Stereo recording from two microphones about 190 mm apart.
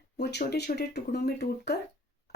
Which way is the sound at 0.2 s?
60° left (ahead or behind).